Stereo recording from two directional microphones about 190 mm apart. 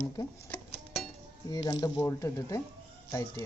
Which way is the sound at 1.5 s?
20° left (ahead or behind).